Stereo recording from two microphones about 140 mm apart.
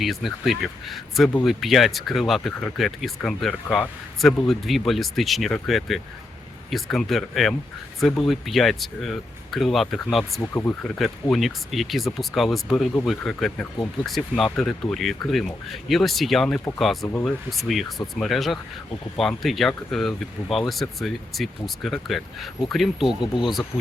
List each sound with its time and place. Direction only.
0.0 s speech: centre (ahead or behind)
10.5 s speech: 15° left (ahead or behind)
10.9 s speech: centre (ahead or behind)